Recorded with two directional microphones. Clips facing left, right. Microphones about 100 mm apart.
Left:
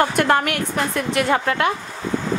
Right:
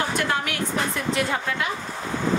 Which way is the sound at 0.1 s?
55° left (ahead or behind).